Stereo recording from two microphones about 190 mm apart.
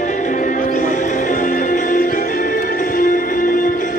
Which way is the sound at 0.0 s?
40° left (ahead or behind).